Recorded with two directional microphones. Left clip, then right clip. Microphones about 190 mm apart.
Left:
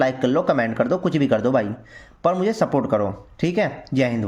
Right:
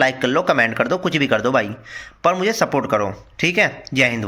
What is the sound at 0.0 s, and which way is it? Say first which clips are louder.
A man's voice: right 2 dB; 25° left (ahead or behind).